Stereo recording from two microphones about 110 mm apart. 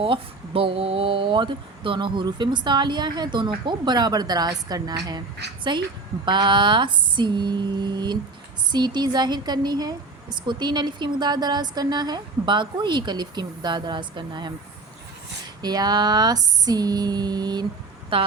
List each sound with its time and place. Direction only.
0.0 s speech: 55° right (ahead or behind)
15.6 s speech: 40° right (ahead or behind)
18.1 s speech: 50° right (ahead or behind)